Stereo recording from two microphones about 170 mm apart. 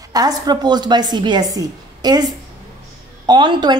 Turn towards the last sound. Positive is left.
turn(degrees=-25)  # may be behind; listen again after turning